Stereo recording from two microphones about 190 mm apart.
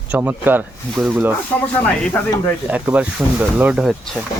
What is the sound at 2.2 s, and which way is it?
Speech, 10° left (ahead or behind).